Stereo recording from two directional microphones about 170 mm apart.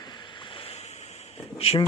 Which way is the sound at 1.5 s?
35° left (ahead or behind).